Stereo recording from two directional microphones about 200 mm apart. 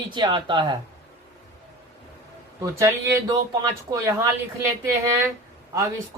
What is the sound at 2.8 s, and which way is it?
Speech, 15° right (ahead or behind).